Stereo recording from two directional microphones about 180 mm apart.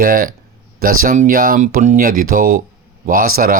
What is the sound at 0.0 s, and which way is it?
Speech, 55° right (ahead or behind).